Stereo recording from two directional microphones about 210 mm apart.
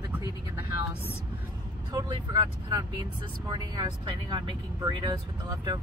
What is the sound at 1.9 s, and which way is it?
Speech, 20° right (ahead or behind).